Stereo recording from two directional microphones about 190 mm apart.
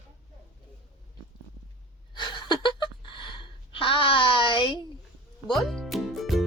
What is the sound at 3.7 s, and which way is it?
Speech, 25° left (ahead or behind).